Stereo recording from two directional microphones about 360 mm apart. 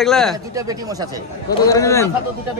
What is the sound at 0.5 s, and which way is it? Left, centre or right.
Speech, centre.